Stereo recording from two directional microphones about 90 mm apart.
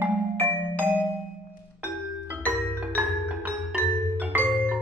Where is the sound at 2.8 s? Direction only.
15° right (ahead or behind).